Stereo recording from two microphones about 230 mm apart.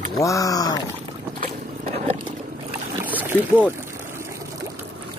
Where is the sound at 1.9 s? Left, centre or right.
Right.